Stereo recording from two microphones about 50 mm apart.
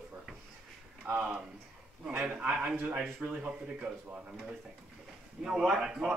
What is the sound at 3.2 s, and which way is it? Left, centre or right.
Speech, right.